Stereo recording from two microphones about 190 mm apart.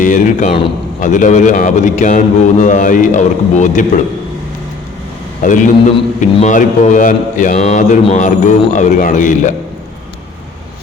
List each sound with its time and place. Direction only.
0.0 s a man's voice: 40° left (ahead or behind)
5.4 s a man's voice: 45° left (ahead or behind)